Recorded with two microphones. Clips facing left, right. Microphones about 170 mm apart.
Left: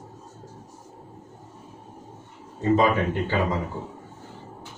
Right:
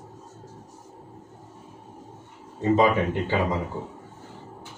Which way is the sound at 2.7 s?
20° right (ahead or behind).